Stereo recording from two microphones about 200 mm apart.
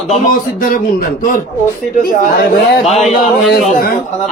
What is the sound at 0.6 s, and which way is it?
A man's voice, 45° left (ahead or behind).